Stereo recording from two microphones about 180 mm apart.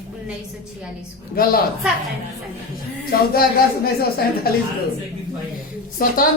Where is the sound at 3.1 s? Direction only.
55° left (ahead or behind).